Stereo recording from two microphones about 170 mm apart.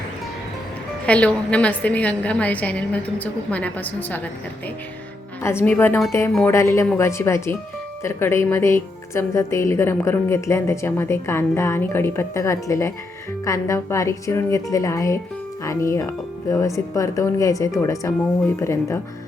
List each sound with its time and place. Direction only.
1.0 s a woman's voice: 10° left (ahead or behind)
5.4 s a woman's voice: 15° left (ahead or behind)